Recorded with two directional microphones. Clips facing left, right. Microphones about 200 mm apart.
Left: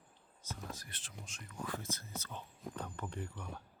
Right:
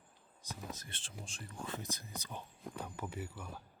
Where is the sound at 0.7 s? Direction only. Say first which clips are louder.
Right 1 dB; 25° right (ahead or behind); by 3.6 s 5° right (ahead or behind).